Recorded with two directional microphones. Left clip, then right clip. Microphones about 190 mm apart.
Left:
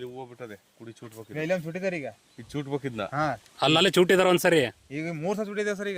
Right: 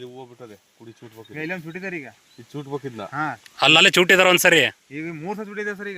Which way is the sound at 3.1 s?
65° left (ahead or behind).